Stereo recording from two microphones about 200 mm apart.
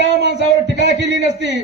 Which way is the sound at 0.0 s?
60° right (ahead or behind).